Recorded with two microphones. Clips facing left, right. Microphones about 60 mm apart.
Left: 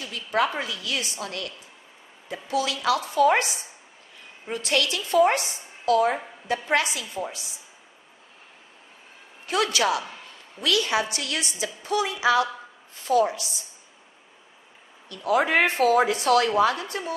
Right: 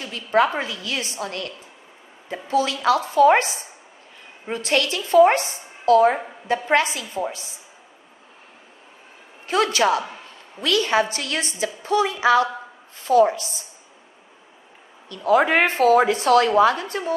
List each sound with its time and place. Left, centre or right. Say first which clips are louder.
0.0 s a woman's voice: right 5 dB; right
9.5 s a woman's voice: right 4 dB; right
15.1 s a woman's voice: right 4 dB; right
15.6 s a woman's voice: right 4 dB; right